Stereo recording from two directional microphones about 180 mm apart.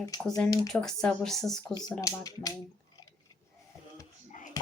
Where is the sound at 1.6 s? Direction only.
20° left (ahead or behind).